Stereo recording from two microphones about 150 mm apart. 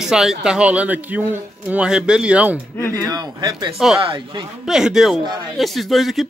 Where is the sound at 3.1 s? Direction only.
25° right (ahead or behind).